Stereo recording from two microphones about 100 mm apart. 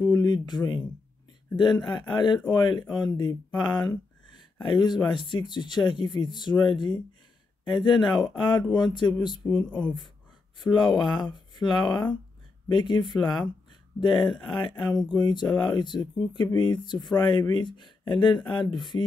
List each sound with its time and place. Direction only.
0.0 s speech: 40° left (ahead or behind)
9.5 s speech: 20° left (ahead or behind)
10.6 s speech: 50° left (ahead or behind)